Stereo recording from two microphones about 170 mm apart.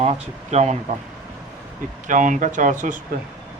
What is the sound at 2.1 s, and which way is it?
Speech, 50° right (ahead or behind).